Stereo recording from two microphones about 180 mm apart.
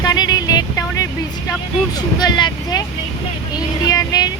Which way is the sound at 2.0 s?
25° left (ahead or behind).